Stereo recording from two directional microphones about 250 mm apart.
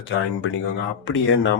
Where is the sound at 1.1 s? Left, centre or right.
Left.